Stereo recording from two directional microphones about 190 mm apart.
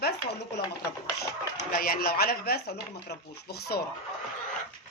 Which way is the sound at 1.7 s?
50° left (ahead or behind).